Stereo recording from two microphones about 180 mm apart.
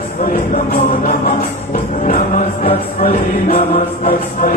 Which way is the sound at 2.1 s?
50° left (ahead or behind).